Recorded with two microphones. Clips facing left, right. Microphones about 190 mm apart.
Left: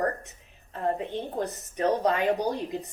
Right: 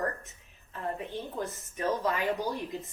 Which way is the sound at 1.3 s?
40° left (ahead or behind).